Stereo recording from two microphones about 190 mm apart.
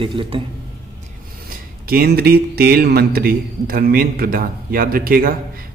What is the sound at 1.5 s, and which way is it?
Speech, 50° right (ahead or behind).